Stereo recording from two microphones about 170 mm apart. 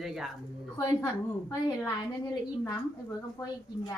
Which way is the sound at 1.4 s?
20° left (ahead or behind).